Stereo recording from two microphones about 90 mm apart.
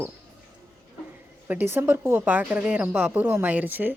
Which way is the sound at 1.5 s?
20° right (ahead or behind).